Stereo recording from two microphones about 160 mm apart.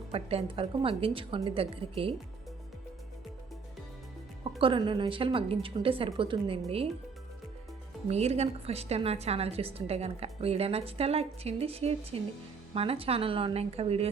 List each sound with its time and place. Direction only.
0.1 s a woman's voice: 35° right (ahead or behind)
4.6 s a woman's voice: 30° right (ahead or behind)
8.0 s a woman's voice: 40° right (ahead or behind)